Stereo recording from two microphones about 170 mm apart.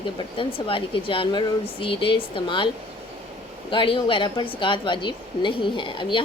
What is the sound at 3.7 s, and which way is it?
A woman's voice, 30° left (ahead or behind).